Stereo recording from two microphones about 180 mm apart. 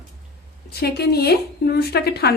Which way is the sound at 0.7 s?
65° left (ahead or behind).